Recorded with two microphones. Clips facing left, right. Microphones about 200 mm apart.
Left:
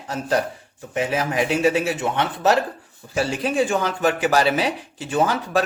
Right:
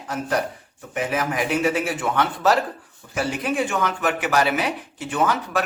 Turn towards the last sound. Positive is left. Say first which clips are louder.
# left 2 dB
turn(degrees=30)  # may be behind; listen again after turning